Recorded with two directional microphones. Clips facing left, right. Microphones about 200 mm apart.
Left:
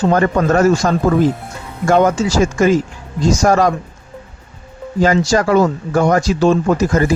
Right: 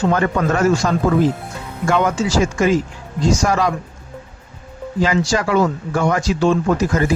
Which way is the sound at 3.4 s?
45° left (ahead or behind).